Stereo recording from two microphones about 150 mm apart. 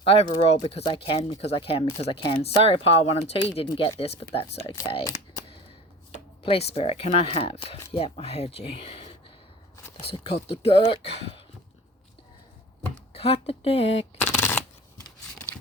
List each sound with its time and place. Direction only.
0.0 s speech: 40° left (ahead or behind)
6.4 s speech: 40° left (ahead or behind)
13.1 s speech: 40° left (ahead or behind)
14.2 s shuffling cards: 15° left (ahead or behind)